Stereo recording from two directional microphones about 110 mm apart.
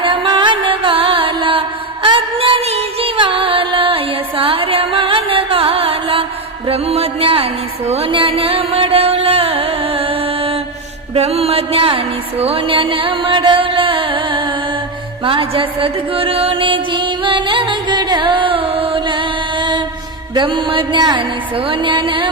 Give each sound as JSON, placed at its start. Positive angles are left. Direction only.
{"t": 0.0, "sound": "music", "side_deg": -50}
{"t": 2.6, "sound": "music", "side_deg": -70}
{"t": 3.2, "sound": "music", "side_deg": -50}